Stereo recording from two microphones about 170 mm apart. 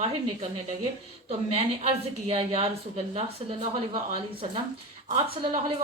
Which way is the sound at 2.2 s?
35° right (ahead or behind).